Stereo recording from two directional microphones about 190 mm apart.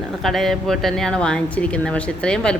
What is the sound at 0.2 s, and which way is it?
A woman's voice, centre (ahead or behind).